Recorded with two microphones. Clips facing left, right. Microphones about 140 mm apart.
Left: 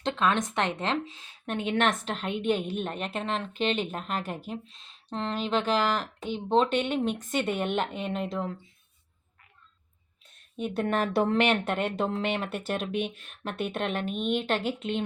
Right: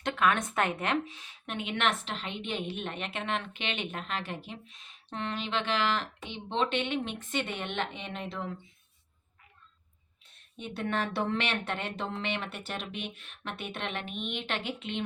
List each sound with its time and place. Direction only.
0.0 s speech: 30° left (ahead or behind)
1.5 s a woman's voice: 45° left (ahead or behind)
4.8 s speech: 35° left (ahead or behind)
10.6 s a woman's voice: 45° left (ahead or behind)